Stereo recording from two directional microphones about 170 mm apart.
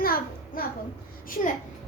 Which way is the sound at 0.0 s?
60° left (ahead or behind).